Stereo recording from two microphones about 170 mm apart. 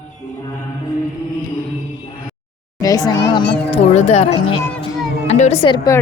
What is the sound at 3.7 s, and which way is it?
Speech, 40° left (ahead or behind).